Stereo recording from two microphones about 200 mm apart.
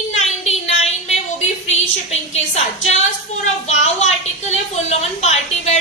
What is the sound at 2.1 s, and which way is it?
Speech, 35° left (ahead or behind).